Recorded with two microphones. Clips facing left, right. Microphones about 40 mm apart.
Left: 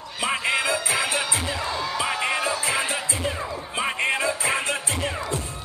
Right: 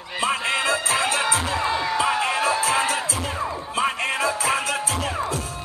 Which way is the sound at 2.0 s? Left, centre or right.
Centre.